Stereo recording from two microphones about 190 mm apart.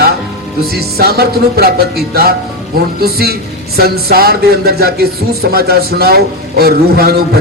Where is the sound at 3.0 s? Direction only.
55° right (ahead or behind).